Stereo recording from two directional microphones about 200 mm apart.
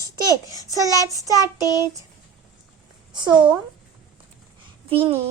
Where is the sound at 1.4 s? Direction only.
20° left (ahead or behind).